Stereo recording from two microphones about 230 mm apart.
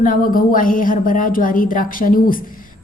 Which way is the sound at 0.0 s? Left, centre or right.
Left.